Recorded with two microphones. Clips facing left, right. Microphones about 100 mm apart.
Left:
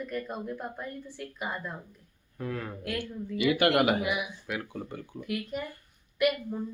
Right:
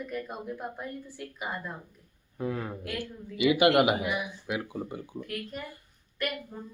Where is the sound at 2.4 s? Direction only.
20° right (ahead or behind).